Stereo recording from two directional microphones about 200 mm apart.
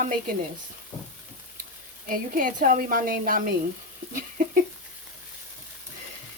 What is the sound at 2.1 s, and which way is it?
Speech, 45° right (ahead or behind).